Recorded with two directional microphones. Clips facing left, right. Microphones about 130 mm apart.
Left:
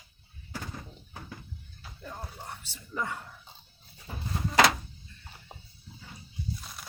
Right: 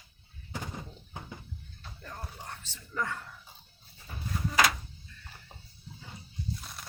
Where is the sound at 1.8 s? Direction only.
10° left (ahead or behind).